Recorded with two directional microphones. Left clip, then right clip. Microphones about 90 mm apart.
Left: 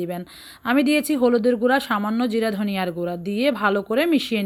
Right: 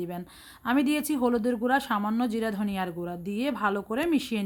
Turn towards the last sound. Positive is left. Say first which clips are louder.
# left 7 dB
turn(degrees=25)  # may be behind; listen again after turning